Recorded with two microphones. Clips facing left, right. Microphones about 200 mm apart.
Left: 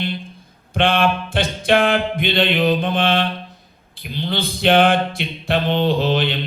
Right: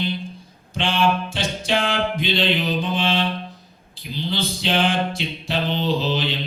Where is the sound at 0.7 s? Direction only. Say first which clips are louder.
Left 3 dB; 55° left (ahead or behind).